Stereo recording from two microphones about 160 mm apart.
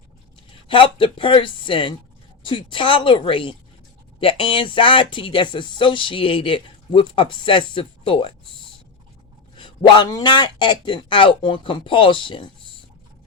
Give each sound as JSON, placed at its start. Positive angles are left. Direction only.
{"t": 0.7, "sound": "speech", "side_deg": 35}
{"t": 9.6, "sound": "speech", "side_deg": 30}